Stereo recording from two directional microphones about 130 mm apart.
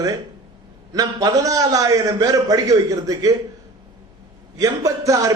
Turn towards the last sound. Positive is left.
turn(degrees=-25)  # may be behind; listen again after turning